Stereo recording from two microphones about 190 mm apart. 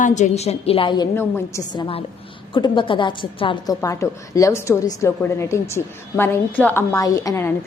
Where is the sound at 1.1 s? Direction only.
15° left (ahead or behind).